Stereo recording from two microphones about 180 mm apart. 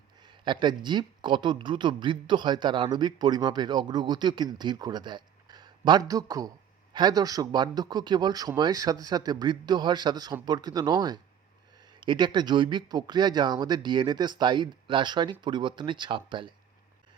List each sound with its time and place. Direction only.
0.2 s speech: 25° right (ahead or behind)